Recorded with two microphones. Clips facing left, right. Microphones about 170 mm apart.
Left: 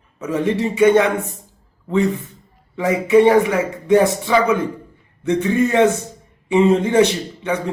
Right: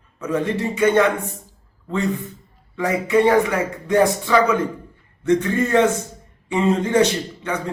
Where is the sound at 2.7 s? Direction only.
20° left (ahead or behind).